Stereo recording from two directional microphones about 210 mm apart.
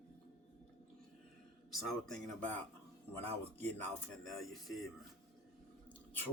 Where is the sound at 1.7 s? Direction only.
Centre (ahead or behind).